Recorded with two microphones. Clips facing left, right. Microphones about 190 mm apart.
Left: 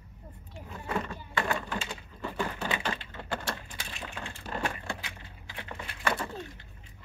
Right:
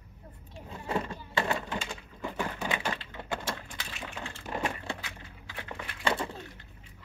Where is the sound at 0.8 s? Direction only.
25° right (ahead or behind).